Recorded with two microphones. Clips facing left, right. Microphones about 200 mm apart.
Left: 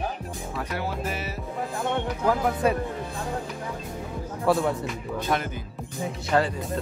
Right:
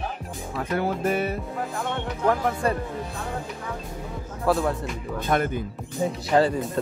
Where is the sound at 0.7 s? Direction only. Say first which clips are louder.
Right 9 dB; 55° right (ahead or behind).